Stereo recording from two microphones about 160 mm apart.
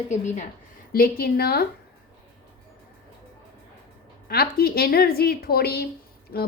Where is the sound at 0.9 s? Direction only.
70° left (ahead or behind).